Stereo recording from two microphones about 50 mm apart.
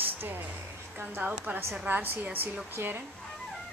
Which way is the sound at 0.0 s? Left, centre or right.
Right.